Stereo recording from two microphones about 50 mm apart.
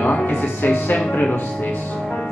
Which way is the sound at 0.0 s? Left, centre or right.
Left.